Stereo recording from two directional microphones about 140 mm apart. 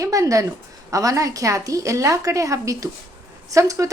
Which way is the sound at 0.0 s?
25° right (ahead or behind).